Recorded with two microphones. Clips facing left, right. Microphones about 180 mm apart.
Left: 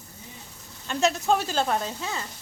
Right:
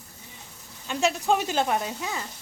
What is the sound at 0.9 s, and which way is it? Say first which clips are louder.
Speech: left 1 dB; 10° right (ahead or behind).